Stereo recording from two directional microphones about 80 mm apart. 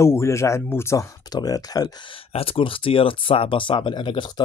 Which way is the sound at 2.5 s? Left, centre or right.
Left.